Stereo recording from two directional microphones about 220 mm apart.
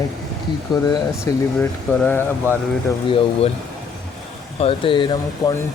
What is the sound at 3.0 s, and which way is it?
Speech, 25° left (ahead or behind).